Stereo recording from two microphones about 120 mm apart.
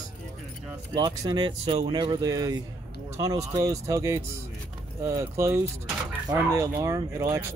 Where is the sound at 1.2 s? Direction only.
35° right (ahead or behind).